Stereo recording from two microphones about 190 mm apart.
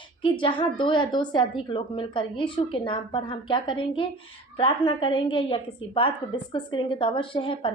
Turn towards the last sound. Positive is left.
turn(degrees=25)  # may be behind; listen again after turning